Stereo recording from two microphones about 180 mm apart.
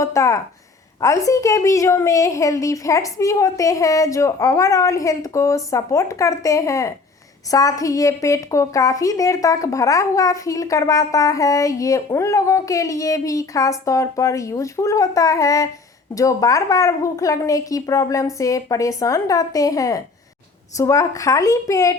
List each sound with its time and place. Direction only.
0.0 s a woman's voice: 15° left (ahead or behind)